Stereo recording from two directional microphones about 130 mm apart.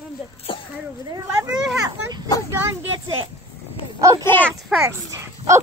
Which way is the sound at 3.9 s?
25° right (ahead or behind).